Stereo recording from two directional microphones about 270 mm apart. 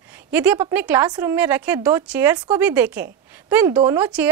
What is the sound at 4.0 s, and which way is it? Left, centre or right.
Speech, centre.